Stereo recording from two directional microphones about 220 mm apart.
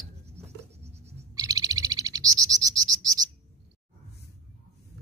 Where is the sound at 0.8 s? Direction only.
30° right (ahead or behind).